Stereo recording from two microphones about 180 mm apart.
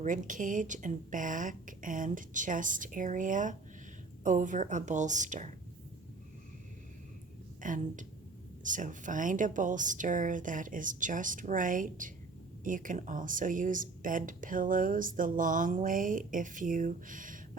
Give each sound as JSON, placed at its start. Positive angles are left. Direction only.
{"t": 0.0, "sound": "speech", "side_deg": -45}
{"t": 7.6, "sound": "speech", "side_deg": -45}